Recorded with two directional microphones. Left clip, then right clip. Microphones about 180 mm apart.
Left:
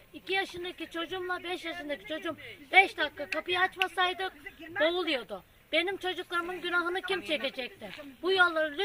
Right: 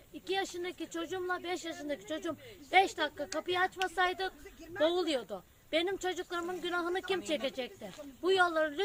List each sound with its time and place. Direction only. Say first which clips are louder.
0.3 s speech: left 3 dB; 20° right (ahead or behind)